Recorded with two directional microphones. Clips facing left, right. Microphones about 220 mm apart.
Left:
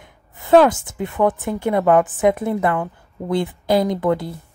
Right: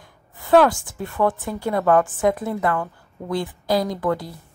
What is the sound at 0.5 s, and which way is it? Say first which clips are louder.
Speech: left 3 dB; 20° left (ahead or behind).